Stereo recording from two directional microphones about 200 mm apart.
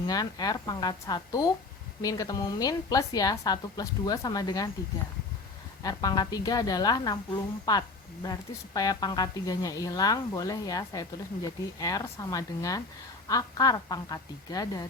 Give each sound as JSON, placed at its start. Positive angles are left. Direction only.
{"t": 0.1, "sound": "speech", "side_deg": 20}
{"t": 5.8, "sound": "speech", "side_deg": 20}